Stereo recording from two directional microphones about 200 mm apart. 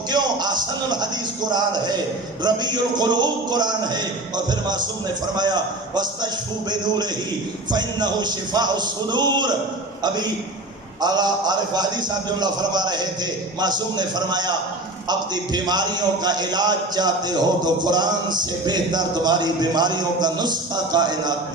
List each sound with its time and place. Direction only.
0.1 s a man's voice: 20° right (ahead or behind)
11.0 s a man's voice: 20° right (ahead or behind)